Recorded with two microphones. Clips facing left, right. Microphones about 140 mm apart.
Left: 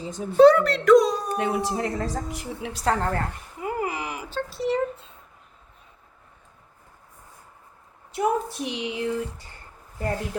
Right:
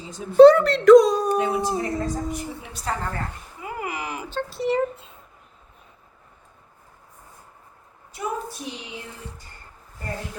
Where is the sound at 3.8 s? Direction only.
30° left (ahead or behind).